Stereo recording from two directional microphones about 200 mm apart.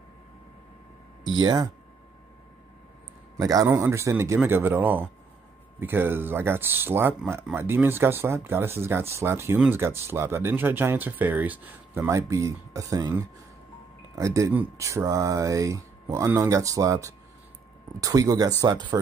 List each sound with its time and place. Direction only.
1.2 s speech: 20° right (ahead or behind)
3.3 s speech: 15° right (ahead or behind)